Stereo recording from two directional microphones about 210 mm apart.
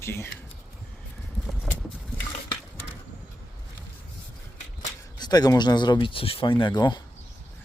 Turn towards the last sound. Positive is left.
turn(degrees=20)  # may be behind; listen again after turning